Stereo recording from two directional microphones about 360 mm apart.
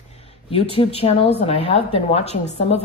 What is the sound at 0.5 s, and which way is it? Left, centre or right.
Speech, centre.